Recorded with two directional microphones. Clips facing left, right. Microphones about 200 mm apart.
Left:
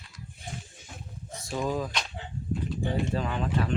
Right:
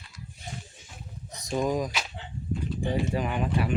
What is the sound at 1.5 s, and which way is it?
Speech, 15° right (ahead or behind).